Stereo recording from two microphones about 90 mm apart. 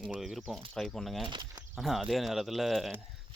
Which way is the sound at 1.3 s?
55° right (ahead or behind).